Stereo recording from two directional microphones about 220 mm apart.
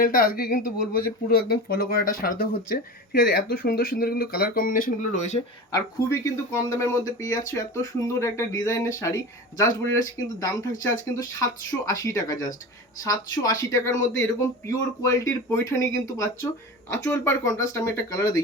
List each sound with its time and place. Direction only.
0.0 s speech: 40° left (ahead or behind)
5.7 s speech: 15° left (ahead or behind)